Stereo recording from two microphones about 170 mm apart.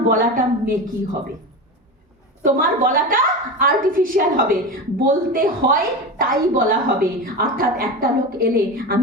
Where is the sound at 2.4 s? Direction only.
55° right (ahead or behind).